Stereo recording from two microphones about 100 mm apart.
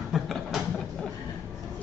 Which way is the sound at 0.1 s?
Centre (ahead or behind).